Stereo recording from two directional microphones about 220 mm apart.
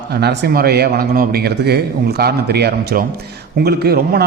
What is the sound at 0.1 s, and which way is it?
A man's voice, 45° right (ahead or behind).